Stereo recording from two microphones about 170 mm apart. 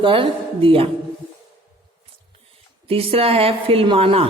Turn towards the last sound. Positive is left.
turn(degrees=-35)  # may be behind; listen again after turning